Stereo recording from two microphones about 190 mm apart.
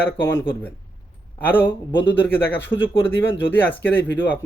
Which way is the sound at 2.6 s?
80° left.